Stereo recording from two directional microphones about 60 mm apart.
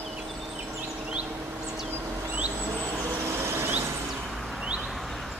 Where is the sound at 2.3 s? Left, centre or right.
Right.